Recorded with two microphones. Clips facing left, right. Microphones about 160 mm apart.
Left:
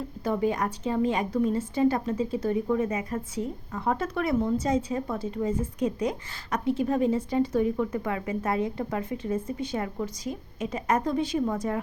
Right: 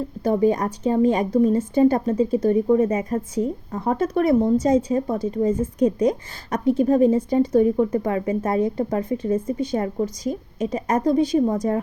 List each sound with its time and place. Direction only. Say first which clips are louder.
0.3 s a woman's voice: right 7 dB; 35° right (ahead or behind)